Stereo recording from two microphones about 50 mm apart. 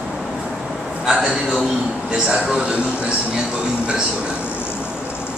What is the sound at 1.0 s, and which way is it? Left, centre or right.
A man's voice, centre.